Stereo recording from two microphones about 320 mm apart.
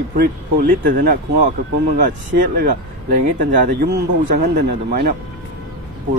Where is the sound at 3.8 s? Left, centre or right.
Right.